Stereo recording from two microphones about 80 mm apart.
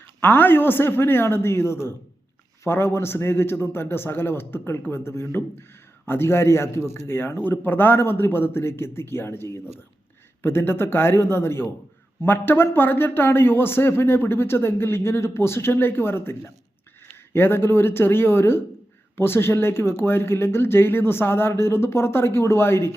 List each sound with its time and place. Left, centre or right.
0.2 s speech: left